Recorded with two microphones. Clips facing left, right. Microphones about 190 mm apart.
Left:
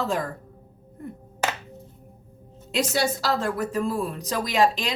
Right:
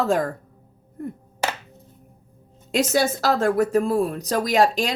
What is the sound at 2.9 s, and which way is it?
Speech, 50° right (ahead or behind).